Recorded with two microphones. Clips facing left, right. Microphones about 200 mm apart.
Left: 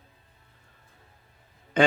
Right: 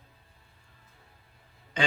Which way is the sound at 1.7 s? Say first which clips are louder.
Left 9 dB; 55° left (ahead or behind).